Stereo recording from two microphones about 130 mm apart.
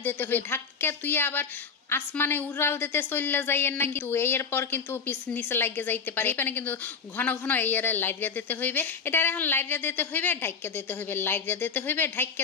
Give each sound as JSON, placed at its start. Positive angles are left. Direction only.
{"t": 0.0, "sound": "a woman's voice", "side_deg": 15}